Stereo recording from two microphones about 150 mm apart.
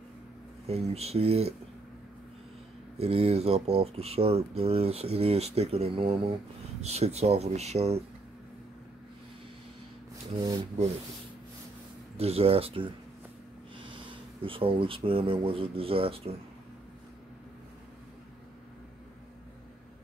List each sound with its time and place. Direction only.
0.7 s speech: 45° right (ahead or behind)
3.0 s speech: 40° right (ahead or behind)
12.2 s speech: 40° right (ahead or behind)